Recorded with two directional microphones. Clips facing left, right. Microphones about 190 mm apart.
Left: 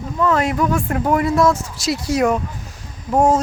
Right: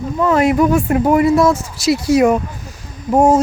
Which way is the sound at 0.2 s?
10° right (ahead or behind).